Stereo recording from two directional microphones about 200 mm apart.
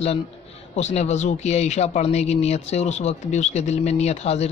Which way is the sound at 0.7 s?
35° left (ahead or behind).